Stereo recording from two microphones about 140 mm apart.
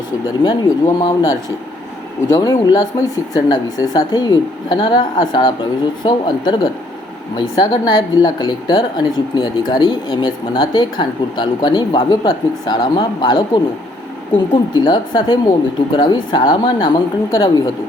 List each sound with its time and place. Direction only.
0.4 s speech: 30° left (ahead or behind)
14.5 s speech: 30° left (ahead or behind)